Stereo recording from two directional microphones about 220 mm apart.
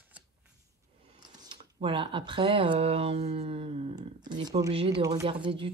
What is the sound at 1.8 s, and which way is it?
Speech, 25° right (ahead or behind).